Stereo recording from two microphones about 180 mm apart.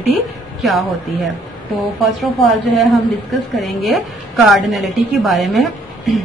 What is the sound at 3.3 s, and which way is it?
A woman's voice, centre (ahead or behind).